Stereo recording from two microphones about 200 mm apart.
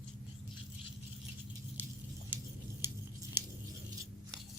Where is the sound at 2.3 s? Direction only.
10° right (ahead or behind).